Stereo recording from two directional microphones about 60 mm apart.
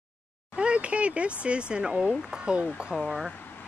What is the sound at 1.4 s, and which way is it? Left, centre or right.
Speech, centre.